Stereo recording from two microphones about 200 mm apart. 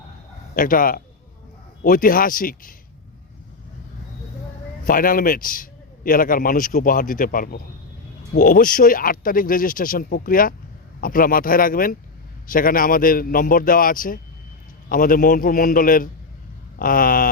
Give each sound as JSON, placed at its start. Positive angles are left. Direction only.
{"t": 0.5, "sound": "a man's voice", "side_deg": 45}
{"t": 4.9, "sound": "a man's voice", "side_deg": 45}